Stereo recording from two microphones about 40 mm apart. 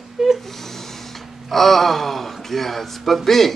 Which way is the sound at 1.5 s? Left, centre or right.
Centre.